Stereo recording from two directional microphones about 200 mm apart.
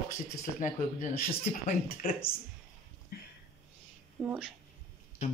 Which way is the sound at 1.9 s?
45° left (ahead or behind).